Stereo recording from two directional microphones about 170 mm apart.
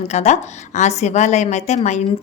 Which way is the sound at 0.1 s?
40° left (ahead or behind).